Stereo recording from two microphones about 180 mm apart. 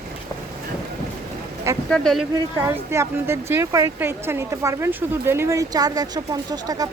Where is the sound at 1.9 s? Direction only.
Centre (ahead or behind).